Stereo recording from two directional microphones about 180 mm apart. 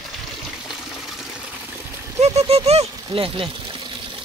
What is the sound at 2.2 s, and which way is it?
Speech, 35° right (ahead or behind).